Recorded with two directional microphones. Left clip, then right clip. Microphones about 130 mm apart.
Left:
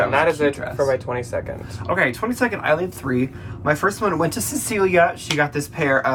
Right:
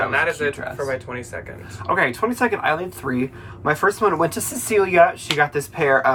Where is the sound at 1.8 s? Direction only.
20° right (ahead or behind).